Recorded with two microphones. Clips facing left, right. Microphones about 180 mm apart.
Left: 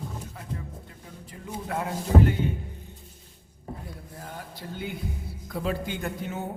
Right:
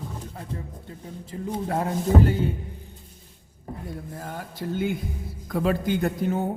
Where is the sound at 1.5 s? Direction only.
35° right (ahead or behind).